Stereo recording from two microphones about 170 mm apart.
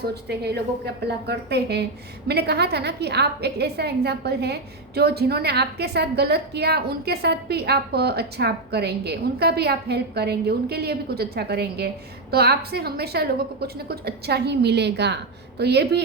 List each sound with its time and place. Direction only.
0.0 s a woman's voice: 70° right (ahead or behind)